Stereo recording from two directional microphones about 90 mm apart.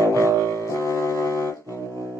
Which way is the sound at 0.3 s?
35° right (ahead or behind).